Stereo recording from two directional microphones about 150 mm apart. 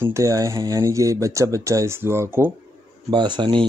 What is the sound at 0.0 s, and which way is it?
Speech, 20° right (ahead or behind).